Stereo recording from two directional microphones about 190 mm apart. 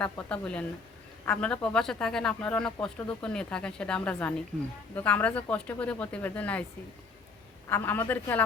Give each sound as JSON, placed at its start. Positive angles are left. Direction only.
{"t": 0.0, "sound": "speech", "side_deg": 5}
{"t": 7.7, "sound": "speech", "side_deg": 10}